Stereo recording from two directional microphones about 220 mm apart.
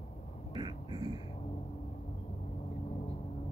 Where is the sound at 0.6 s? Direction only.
20° right (ahead or behind).